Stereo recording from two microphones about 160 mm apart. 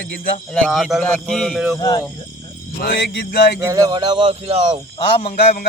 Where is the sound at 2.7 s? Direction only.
70° left (ahead or behind).